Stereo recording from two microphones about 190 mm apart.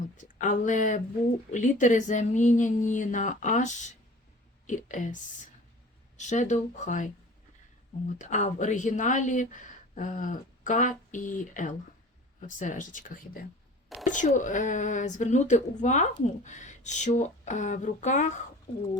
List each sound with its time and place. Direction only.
0.3 s speech: 40° left (ahead or behind)
8.2 s speech: 40° left (ahead or behind)